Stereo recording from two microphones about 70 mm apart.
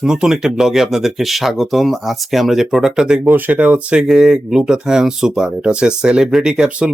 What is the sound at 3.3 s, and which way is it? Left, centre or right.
Speech, centre.